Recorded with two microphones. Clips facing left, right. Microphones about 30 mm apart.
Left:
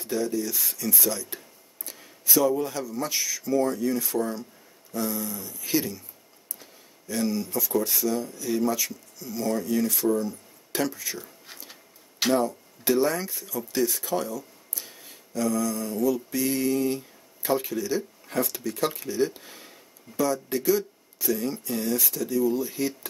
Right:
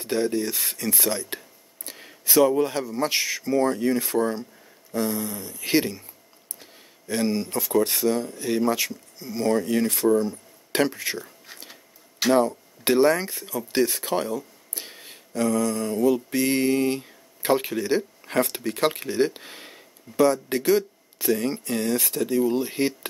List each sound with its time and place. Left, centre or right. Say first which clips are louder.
0.0 s speech: right 3 dB; right
7.1 s speech: right 3 dB; right
11.5 s a sound: right 2 dB; centre
12.4 s speech: right 5 dB; right